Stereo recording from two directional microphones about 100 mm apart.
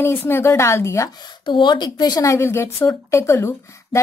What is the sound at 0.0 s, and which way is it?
Speech, 25° left (ahead or behind).